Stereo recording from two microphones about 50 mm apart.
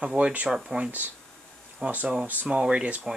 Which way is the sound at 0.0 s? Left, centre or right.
Right.